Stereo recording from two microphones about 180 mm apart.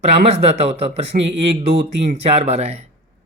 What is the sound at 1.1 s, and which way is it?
Speech, 50° right (ahead or behind).